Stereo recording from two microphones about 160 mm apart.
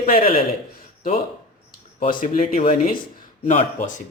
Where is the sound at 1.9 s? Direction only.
60° left (ahead or behind).